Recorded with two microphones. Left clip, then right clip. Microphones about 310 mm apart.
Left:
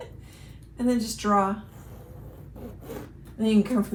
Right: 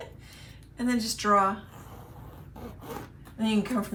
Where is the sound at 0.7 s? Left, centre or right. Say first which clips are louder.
Left 3 dB; centre.